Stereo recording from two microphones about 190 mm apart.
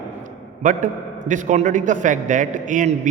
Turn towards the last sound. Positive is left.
turn(degrees=-40)  # may be behind; listen again after turning